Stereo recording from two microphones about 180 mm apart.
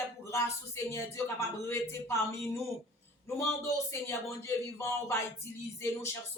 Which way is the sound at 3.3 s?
15° left (ahead or behind).